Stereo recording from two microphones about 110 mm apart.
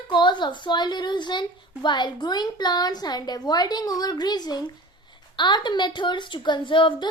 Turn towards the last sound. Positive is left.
turn(degrees=50)  # may be behind; listen again after turning